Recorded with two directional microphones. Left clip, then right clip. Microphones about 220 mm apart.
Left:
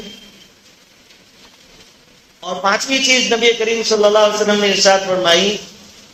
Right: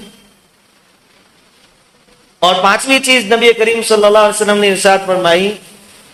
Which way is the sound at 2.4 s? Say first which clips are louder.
Right 8 dB; 45° right (ahead or behind).